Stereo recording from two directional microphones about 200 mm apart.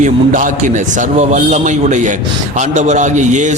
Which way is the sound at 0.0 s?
40° right (ahead or behind).